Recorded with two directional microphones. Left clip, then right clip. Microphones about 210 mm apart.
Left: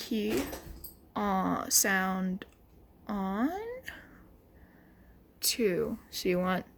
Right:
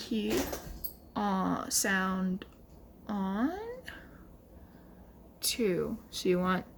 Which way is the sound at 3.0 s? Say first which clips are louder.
Left 1 dB; 15° left (ahead or behind).